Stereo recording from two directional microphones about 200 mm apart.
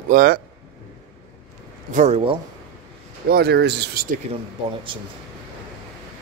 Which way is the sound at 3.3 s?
55° right (ahead or behind).